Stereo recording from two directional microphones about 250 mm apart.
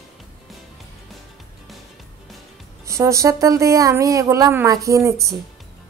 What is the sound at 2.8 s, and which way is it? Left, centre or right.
Speech, centre.